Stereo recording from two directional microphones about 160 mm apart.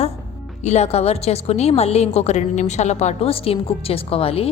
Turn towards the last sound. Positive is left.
turn(degrees=35)  # may be behind; listen again after turning